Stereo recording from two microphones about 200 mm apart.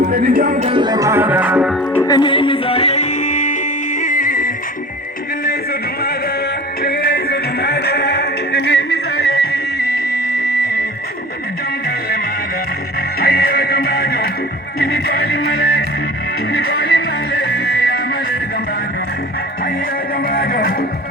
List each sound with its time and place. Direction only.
0.0 s music: 45° right (ahead or behind)
0.7 s music: 20° right (ahead or behind); by 2.0 s 5° right (ahead or behind)
2.0 s music: 20° left (ahead or behind); by 4.5 s 45° left (ahead or behind)
6.8 s music: 55° left (ahead or behind)
13.1 s music: 50° left (ahead or behind)
20.2 s music: 45° left (ahead or behind)